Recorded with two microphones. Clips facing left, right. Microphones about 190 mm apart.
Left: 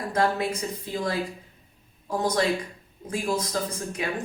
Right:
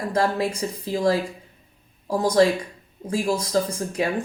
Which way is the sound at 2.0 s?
30° right (ahead or behind).